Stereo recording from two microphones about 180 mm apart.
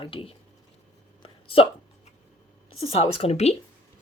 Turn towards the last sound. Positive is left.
turn(degrees=35)  # may be behind; listen again after turning